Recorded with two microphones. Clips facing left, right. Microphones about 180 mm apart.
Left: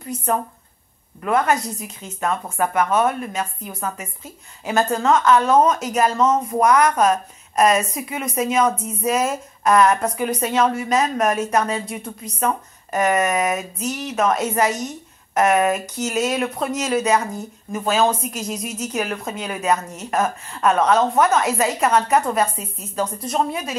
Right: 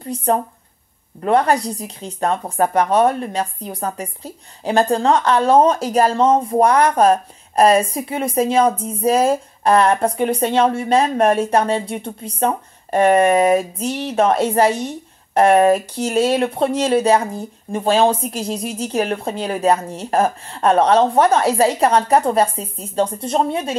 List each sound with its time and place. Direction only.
0.0 s speech: 35° right (ahead or behind)